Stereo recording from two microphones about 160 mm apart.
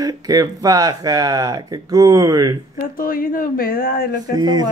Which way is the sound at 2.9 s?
60° left (ahead or behind).